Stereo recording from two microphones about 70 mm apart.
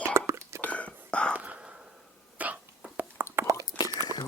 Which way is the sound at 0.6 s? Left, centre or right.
Centre.